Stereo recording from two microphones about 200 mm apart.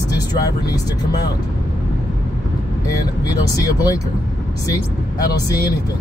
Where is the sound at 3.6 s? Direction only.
15° left (ahead or behind).